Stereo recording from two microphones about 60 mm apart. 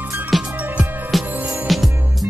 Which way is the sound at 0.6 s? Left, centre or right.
Right.